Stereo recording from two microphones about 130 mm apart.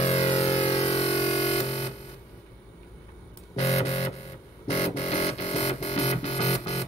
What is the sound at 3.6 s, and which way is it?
Music, 55° left (ahead or behind).